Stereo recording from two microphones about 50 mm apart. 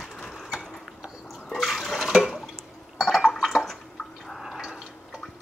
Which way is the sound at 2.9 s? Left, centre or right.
Centre.